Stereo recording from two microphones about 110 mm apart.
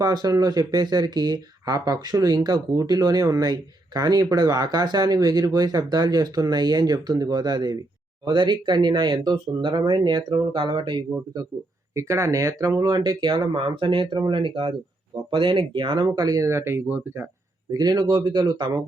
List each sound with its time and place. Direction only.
0.0 s speech: 35° right (ahead or behind)
11.9 s speech: 25° right (ahead or behind)
17.7 s speech: 40° right (ahead or behind)